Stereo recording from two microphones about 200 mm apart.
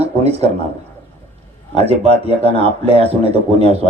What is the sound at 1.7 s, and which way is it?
Speech, 30° right (ahead or behind).